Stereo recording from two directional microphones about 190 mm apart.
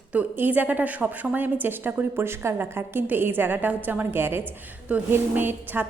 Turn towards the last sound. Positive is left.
turn(degrees=-10)  # may be behind; listen again after turning